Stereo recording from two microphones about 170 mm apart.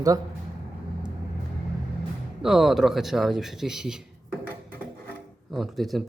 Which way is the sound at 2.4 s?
Centre (ahead or behind).